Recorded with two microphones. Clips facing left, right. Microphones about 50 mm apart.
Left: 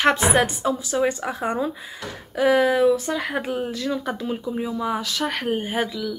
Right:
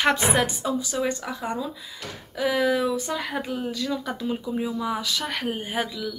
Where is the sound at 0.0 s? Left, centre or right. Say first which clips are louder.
Left 3 dB; centre; by 1.6 s left.